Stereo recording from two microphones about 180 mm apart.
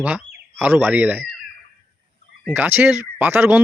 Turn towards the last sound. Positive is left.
turn(degrees=-10)  # may be behind; listen again after turning